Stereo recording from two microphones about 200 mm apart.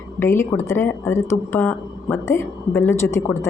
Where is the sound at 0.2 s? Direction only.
10° left (ahead or behind).